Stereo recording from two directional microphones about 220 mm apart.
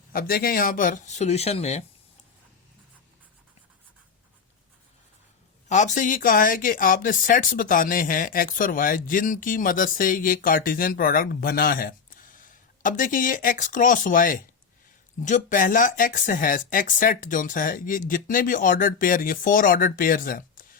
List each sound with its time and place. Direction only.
0.1 s speech: 40° left (ahead or behind)
5.6 s speech: 35° left (ahead or behind)